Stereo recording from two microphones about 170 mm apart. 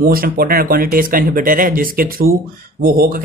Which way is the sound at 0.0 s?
60° right (ahead or behind).